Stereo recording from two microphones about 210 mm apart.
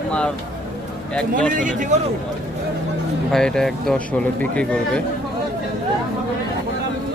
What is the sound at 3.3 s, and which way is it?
Speech, 5° left (ahead or behind).